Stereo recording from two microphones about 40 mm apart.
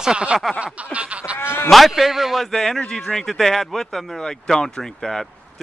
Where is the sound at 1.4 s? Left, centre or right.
Left.